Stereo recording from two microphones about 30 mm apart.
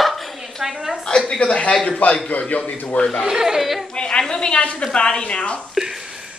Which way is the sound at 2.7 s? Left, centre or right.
Left.